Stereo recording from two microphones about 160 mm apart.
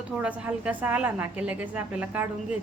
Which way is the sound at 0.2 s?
10° right (ahead or behind).